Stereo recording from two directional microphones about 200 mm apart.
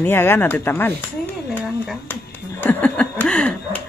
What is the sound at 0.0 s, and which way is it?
Speech, 10° left (ahead or behind).